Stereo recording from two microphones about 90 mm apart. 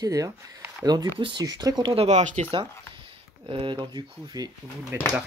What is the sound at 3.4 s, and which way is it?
Speech, 65° right (ahead or behind).